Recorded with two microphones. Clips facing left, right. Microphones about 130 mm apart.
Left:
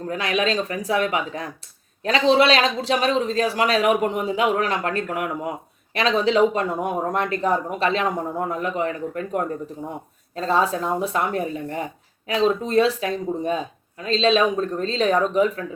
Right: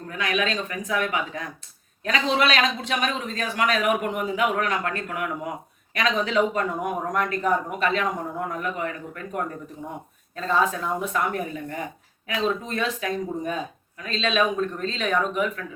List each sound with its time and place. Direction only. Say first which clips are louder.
0.1 s speech: left 3 dB; 30° left (ahead or behind)